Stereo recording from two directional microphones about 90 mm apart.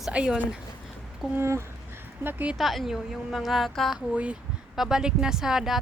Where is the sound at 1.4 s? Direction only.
30° right (ahead or behind).